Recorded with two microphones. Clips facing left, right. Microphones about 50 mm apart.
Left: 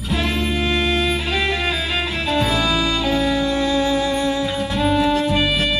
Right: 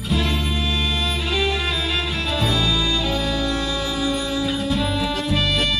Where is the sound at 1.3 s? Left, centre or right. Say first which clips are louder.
Left 2 dB; centre.